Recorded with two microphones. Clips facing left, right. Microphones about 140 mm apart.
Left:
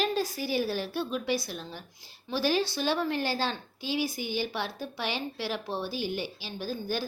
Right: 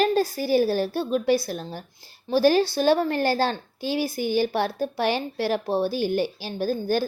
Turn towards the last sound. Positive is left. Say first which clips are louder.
# right 9 dB
turn(degrees=-45)  # may be behind; listen again after turning